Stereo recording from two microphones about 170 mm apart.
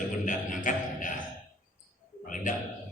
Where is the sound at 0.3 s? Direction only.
50° left (ahead or behind).